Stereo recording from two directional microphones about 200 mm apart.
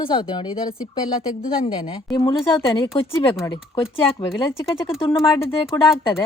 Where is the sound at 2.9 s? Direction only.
25° left (ahead or behind).